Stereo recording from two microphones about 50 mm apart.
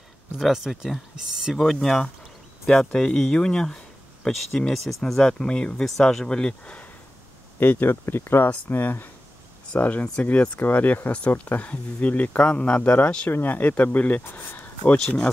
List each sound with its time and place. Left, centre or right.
0.4 s speech: centre
1.6 s speech: centre
7.5 s speech: left
8.0 s speech: left
9.8 s speech: left
13.3 s speech: left
15.0 s speech: centre